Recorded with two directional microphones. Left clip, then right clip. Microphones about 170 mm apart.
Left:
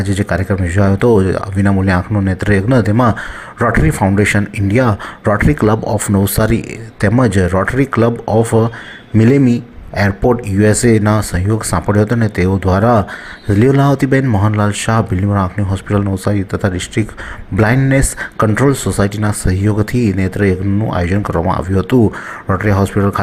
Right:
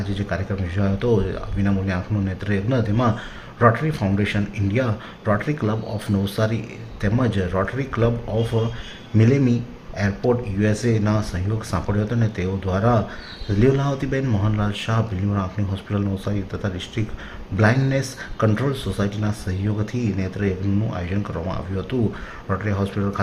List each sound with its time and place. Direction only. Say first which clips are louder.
0.0 s speech: left 10 dB; 40° left (ahead or behind)